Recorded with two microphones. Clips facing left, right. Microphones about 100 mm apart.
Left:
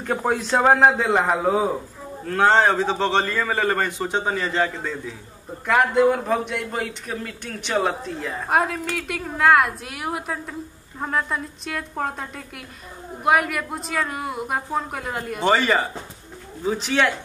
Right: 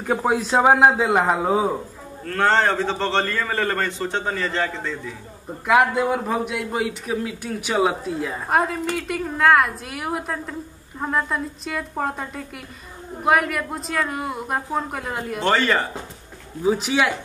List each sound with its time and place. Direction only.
0.0 s a man's voice: 5° right (ahead or behind)
2.2 s a man's voice: 15° left (ahead or behind)
5.7 s a man's voice: 5° right (ahead or behind); by 15.8 s 10° left (ahead or behind)
16.6 s a man's voice: 5° right (ahead or behind)